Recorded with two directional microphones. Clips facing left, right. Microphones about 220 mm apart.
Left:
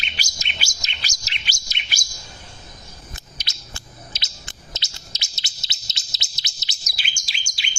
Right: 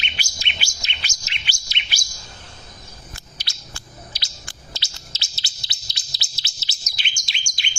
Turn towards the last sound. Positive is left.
turn(degrees=5)  # may be behind; listen again after turning